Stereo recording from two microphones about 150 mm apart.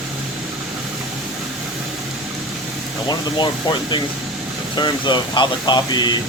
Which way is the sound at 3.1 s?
30° left (ahead or behind).